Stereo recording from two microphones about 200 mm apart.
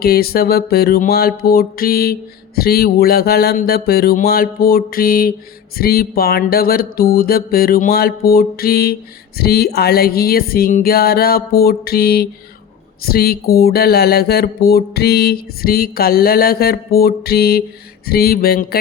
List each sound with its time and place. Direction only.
0.0 s speech: 50° left (ahead or behind)